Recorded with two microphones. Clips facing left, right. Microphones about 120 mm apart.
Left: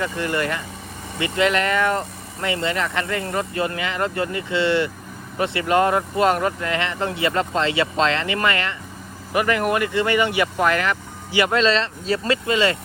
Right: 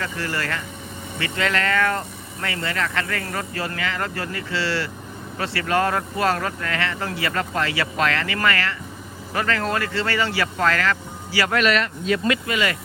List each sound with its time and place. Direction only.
0.0 s speech: 20° left (ahead or behind)